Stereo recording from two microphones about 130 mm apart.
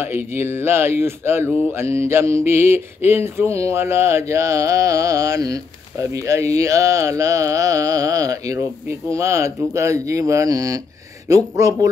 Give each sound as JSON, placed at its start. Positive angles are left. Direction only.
{"t": 0.0, "sound": "speech", "side_deg": -15}